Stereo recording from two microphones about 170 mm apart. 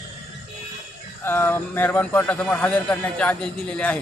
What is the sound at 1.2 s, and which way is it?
A man's voice, 15° left (ahead or behind).